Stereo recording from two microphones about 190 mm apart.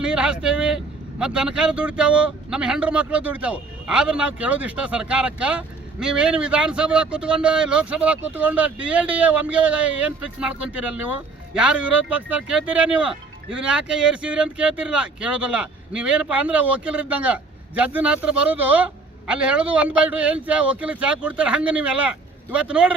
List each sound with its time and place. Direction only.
0.0 s vehicle: 5° right (ahead or behind)
1.2 s speech: 5° right (ahead or behind)